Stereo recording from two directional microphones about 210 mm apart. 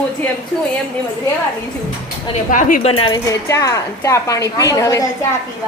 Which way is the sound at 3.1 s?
15° left (ahead or behind).